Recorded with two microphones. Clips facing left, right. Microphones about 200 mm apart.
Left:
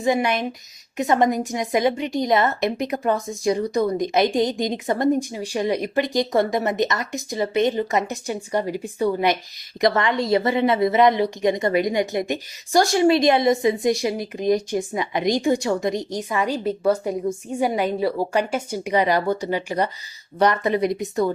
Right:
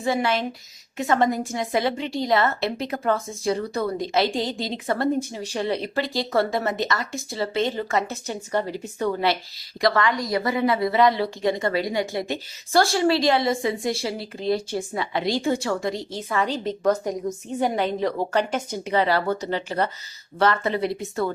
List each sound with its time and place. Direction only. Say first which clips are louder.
0.0 s a woman's voice: left 2 dB; 15° left (ahead or behind)